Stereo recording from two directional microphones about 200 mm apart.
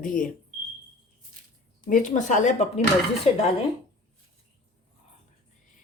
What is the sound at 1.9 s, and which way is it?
Speech, 40° left (ahead or behind).